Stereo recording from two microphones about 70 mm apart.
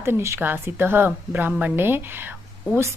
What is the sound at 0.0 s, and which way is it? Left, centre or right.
A woman's voice, right.